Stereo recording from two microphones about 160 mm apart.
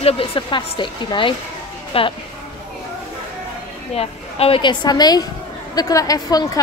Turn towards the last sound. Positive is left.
turn(degrees=25)  # may be behind; listen again after turning